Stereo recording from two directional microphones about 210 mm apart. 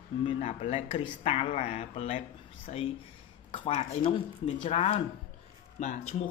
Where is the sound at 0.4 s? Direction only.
30° left (ahead or behind).